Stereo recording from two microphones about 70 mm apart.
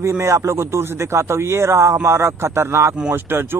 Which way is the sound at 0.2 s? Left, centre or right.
Right.